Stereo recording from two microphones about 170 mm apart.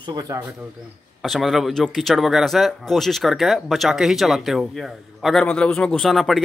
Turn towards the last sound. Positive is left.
turn(degrees=0)  # may be behind; listen again after turning